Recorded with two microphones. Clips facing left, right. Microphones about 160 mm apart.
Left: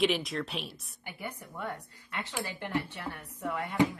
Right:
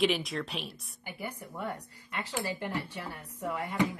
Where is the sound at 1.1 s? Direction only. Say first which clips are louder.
Right 1 dB; 10° right (ahead or behind).